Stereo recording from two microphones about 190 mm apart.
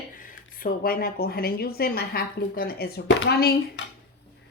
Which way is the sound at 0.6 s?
50° left (ahead or behind).